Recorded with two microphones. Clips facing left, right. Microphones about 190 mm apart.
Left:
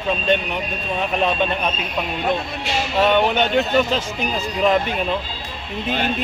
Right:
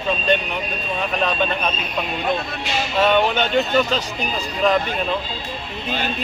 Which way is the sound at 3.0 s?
15° left (ahead or behind).